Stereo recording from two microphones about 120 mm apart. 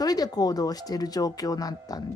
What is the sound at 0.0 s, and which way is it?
Speech, 35° left (ahead or behind).